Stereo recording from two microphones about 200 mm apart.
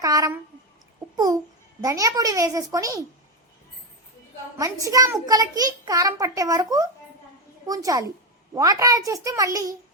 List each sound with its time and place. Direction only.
0.0 s a child's voice: 15° right (ahead or behind)
4.5 s a child's voice: 15° right (ahead or behind)